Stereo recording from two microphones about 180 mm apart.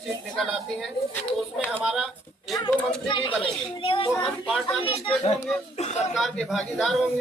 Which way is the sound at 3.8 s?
30° left (ahead or behind).